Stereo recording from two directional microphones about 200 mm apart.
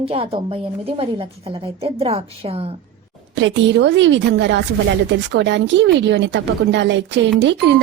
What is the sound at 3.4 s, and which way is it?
Speech, 65° right (ahead or behind).